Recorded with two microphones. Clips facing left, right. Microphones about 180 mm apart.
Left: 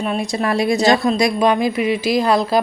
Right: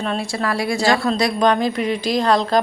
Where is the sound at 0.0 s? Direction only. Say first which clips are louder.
Left 2 dB; 15° left (ahead or behind).